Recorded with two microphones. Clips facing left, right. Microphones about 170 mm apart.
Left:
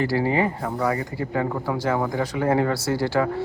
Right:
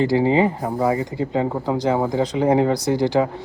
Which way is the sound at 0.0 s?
20° right (ahead or behind).